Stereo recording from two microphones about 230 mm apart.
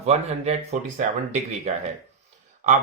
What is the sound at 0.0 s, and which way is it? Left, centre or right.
Speech, right.